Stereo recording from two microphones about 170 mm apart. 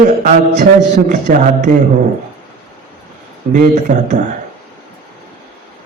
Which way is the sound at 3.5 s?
45° right (ahead or behind).